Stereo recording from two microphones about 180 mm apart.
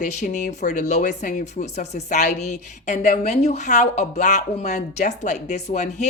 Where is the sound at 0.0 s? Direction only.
40° left (ahead or behind).